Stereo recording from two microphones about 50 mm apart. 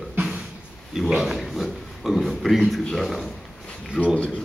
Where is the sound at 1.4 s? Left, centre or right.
Centre.